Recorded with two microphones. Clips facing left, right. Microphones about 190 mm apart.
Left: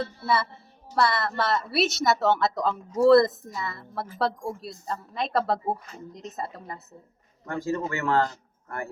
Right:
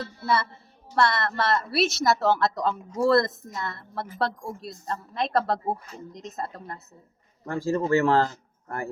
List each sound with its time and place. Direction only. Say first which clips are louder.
0.9 s speech: right 1 dB; centre (ahead or behind)
7.4 s speech: right 3 dB; 30° right (ahead or behind)